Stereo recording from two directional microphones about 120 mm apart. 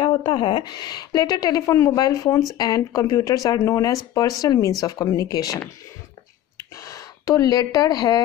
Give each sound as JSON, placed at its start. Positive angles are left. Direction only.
{"t": 0.0, "sound": "a woman's voice", "side_deg": 40}
{"t": 6.9, "sound": "speech", "side_deg": 30}